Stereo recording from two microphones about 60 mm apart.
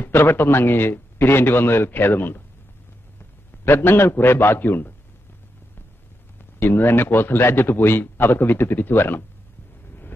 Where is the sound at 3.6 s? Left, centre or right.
Left.